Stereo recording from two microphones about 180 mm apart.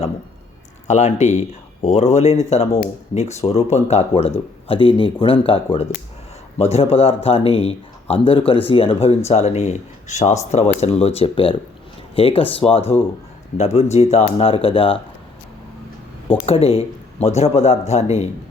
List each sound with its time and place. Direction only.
0.9 s speech: 40° left (ahead or behind)
16.5 s speech: 35° left (ahead or behind)